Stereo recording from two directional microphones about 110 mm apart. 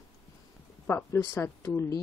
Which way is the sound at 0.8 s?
20° left (ahead or behind).